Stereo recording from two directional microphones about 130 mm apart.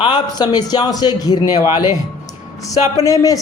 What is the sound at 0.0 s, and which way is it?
A man's voice, 35° left (ahead or behind).